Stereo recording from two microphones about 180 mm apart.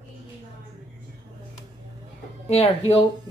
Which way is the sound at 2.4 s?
35° left (ahead or behind).